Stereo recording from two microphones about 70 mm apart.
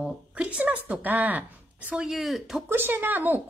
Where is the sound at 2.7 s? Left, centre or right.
Right.